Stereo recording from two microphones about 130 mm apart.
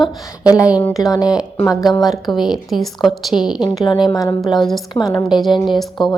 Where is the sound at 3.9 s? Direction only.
35° left (ahead or behind).